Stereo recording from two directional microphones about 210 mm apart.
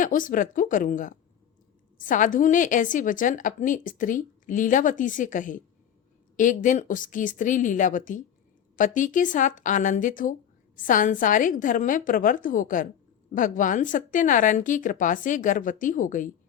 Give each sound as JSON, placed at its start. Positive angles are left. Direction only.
{"t": 0.0, "sound": "a woman's voice", "side_deg": 40}